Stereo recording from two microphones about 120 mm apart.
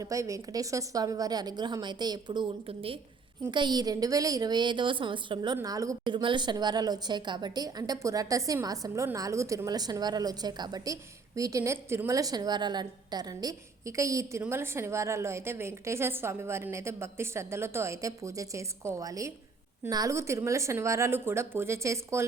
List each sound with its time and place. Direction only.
0.0 s a woman's voice: 25° right (ahead or behind); by 3.0 s 50° right (ahead or behind)
3.5 s a woman's voice: 40° right (ahead or behind)
5.6 s a woman's voice: 30° right (ahead or behind)
6.1 s a woman's voice: 40° right (ahead or behind); by 22.3 s 25° right (ahead or behind)